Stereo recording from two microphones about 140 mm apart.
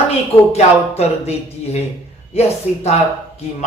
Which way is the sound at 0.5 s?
50° left (ahead or behind).